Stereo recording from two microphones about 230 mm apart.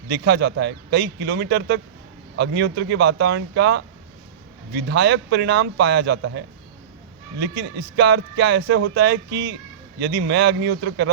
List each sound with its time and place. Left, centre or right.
0.1 s a man's voice: right
4.9 s a man's voice: right